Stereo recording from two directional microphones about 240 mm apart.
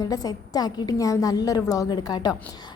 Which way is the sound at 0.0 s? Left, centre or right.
Centre.